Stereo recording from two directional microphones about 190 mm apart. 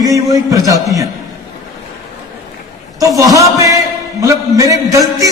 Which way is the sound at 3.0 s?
15° right (ahead or behind).